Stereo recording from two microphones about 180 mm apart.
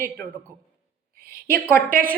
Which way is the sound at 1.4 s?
55° right (ahead or behind).